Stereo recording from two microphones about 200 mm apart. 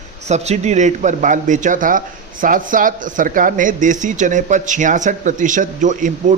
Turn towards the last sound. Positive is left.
turn(degrees=-40)  # may be behind; listen again after turning